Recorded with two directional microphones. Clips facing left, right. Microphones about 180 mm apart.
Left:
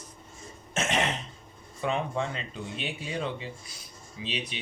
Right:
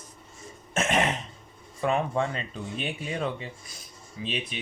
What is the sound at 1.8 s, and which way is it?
Speech, 50° right (ahead or behind).